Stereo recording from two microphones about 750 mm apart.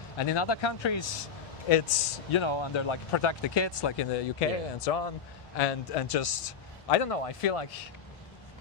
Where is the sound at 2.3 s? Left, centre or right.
Left.